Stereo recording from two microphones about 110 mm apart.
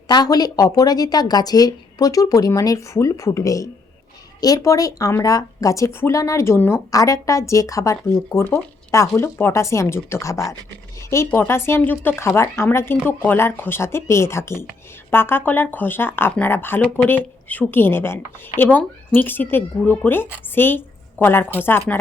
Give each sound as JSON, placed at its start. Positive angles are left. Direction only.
{"t": 0.1, "sound": "speech", "side_deg": 35}